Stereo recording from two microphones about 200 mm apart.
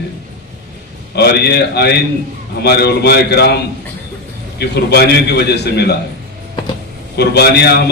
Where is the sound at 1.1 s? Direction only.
55° left (ahead or behind).